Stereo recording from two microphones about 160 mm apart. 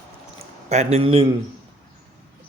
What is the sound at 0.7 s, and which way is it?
Speech, 40° right (ahead or behind).